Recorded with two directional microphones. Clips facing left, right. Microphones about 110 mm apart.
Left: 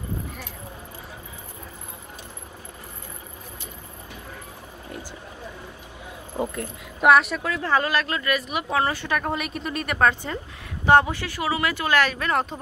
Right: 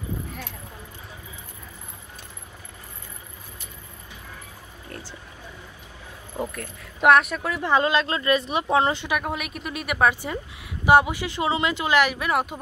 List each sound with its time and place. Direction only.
6.3 s speech: 20° left (ahead or behind)
7.0 s speech: centre (ahead or behind)
7.5 s speech: 20° right (ahead or behind)
9.2 s speech: centre (ahead or behind)